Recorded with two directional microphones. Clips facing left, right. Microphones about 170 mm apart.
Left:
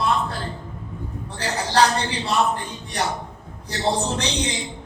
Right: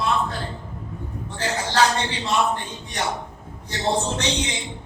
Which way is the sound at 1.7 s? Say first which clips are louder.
Left 2 dB; 35° left (ahead or behind).